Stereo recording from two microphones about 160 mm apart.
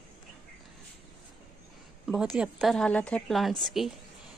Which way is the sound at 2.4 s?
Centre (ahead or behind).